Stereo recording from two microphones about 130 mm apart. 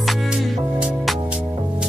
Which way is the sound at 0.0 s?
Centre (ahead or behind).